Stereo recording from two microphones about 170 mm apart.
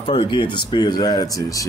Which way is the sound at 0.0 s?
30° left (ahead or behind).